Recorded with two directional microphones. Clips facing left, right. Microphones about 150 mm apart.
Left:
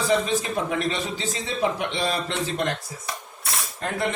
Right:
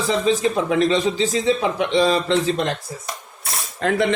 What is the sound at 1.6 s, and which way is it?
Speech, 90° right.